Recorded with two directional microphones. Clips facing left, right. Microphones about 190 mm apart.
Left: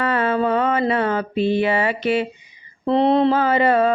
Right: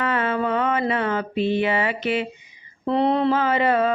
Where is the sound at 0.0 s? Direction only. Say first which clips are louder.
Left 3 dB; 35° left (ahead or behind).